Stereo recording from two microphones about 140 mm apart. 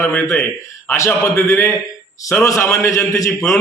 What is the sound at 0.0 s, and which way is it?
A man's voice, 15° left (ahead or behind).